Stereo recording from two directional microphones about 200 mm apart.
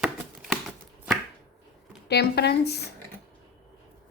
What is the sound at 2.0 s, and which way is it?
Speech, 55° left (ahead or behind).